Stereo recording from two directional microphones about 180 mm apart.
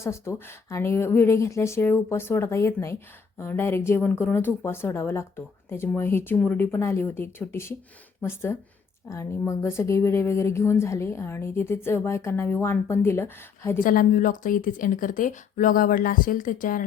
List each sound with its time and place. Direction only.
0.0 s speech: 15° left (ahead or behind)
13.7 s speech: 50° left (ahead or behind)